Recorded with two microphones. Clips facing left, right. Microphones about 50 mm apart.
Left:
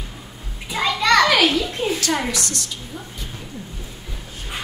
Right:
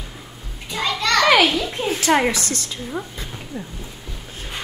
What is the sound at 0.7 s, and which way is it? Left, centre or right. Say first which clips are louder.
Children playing: left 3 dB; centre.